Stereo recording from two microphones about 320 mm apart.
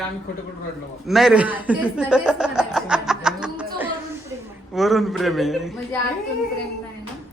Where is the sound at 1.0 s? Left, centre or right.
Centre.